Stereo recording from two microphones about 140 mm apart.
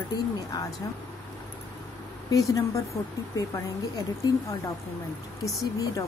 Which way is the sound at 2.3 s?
25° left (ahead or behind).